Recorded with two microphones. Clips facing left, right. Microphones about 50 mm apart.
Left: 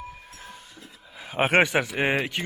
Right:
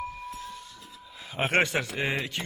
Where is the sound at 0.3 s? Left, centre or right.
Left.